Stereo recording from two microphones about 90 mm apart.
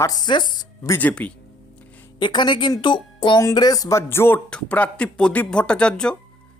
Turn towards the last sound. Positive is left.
turn(degrees=10)  # may be behind; listen again after turning